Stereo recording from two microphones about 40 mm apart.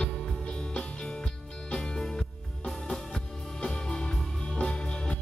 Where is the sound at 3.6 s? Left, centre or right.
Centre.